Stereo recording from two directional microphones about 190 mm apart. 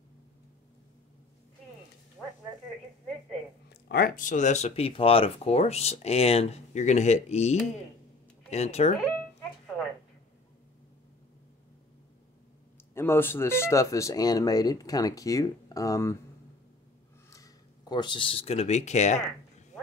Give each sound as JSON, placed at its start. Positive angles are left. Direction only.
{"t": 2.2, "sound": "a sound", "side_deg": 0}
{"t": 3.9, "sound": "speech", "side_deg": 50}
{"t": 9.0, "sound": "music", "side_deg": 0}
{"t": 12.9, "sound": "speech", "side_deg": 10}
{"t": 17.3, "sound": "speech", "side_deg": 20}